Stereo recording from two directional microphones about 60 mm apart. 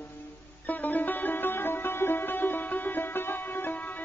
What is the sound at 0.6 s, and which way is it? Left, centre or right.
Music, left.